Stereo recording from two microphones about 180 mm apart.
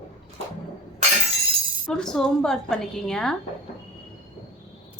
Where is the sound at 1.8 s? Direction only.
5° left (ahead or behind).